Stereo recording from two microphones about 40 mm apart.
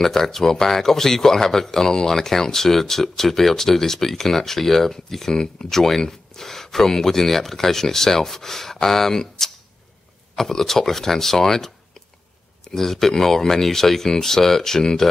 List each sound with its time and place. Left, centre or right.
0.0 s speech: centre